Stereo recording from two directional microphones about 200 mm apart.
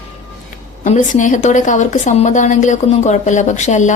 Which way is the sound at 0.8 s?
40° left (ahead or behind).